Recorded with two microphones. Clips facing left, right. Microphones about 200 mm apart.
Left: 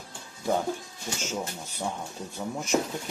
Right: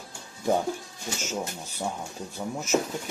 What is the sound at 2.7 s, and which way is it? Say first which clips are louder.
Speech: right 1 dB; centre (ahead or behind).